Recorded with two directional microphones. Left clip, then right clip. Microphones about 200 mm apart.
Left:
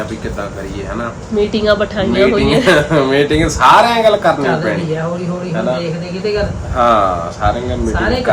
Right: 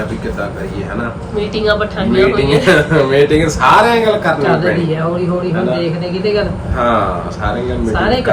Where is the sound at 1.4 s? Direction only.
45° left (ahead or behind).